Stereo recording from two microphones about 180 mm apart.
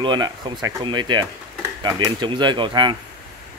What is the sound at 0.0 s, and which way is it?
Speech, 25° right (ahead or behind).